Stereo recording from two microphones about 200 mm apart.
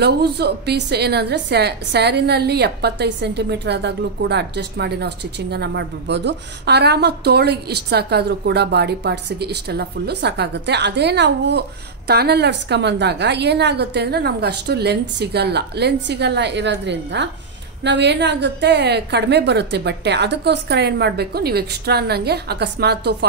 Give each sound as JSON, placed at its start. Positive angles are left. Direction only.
{"t": 0.0, "sound": "a woman's voice", "side_deg": -55}